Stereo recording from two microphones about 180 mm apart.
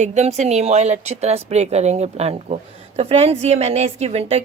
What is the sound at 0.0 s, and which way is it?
A woman's voice, 40° right (ahead or behind).